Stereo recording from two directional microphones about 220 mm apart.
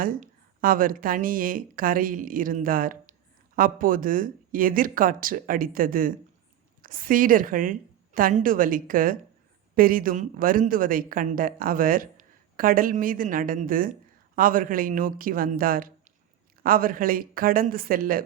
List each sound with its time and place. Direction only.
0.0 s a woman's voice: 40° right (ahead or behind)